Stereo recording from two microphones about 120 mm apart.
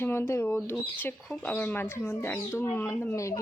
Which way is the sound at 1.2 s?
10° left (ahead or behind).